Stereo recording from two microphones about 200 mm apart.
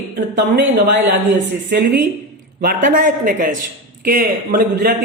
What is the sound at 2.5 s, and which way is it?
A man's voice, 45° right (ahead or behind).